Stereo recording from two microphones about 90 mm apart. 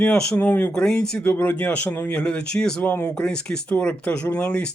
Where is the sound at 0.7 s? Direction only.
10° left (ahead or behind).